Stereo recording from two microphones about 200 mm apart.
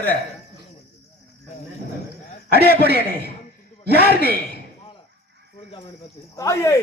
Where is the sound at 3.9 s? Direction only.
50° right (ahead or behind).